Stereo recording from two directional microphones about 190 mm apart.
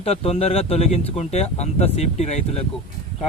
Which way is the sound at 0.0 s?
30° left (ahead or behind).